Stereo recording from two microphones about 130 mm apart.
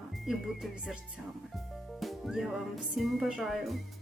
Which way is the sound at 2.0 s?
Centre (ahead or behind).